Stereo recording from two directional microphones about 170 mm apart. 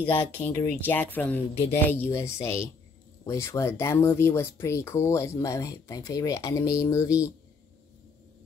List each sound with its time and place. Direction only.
0.0 s speech: 10° left (ahead or behind)